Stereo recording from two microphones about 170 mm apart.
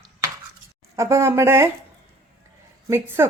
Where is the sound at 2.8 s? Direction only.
15° right (ahead or behind).